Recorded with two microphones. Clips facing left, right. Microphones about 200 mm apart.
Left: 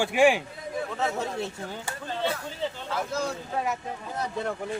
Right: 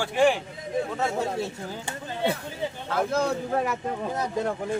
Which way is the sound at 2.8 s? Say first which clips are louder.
Right 8 dB; 55° right (ahead or behind).